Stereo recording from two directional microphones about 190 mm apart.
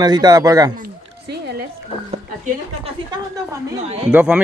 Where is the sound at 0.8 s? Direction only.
60° right (ahead or behind).